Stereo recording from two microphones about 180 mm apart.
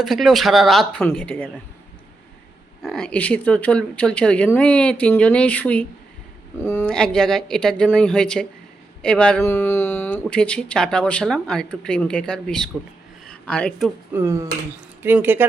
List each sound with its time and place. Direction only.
0.0 s speech: centre (ahead or behind)
2.8 s speech: 5° left (ahead or behind)
14.1 s dishes: 15° right (ahead or behind)